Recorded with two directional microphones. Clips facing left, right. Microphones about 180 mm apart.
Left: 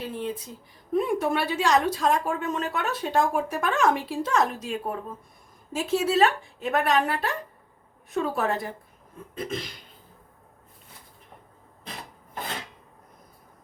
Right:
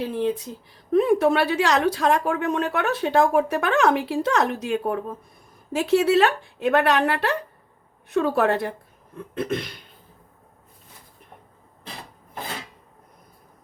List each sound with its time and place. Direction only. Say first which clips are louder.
0.0 s a woman's voice: right 7 dB; 65° right (ahead or behind)